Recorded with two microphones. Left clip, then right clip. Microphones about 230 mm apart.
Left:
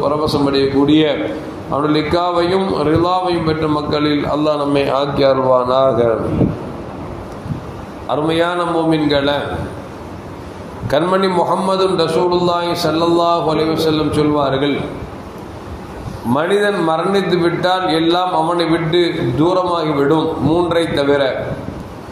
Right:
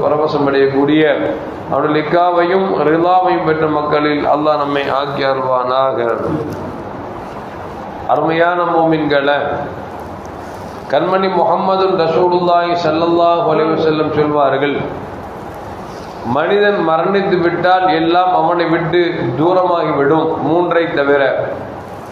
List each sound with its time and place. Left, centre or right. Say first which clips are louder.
0.0 s a man's voice: right 2 dB; left
8.1 s a man's voice: right 3 dB; left
10.9 s a man's voice: right 1 dB; left
16.3 s a man's voice: right 3 dB; left